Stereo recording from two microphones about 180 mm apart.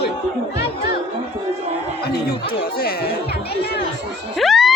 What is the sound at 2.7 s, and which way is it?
Speech, 55° left (ahead or behind).